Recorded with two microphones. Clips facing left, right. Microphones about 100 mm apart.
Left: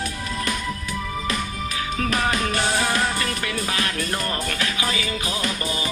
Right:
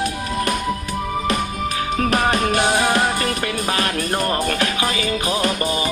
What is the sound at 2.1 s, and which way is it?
Music, 55° right (ahead or behind).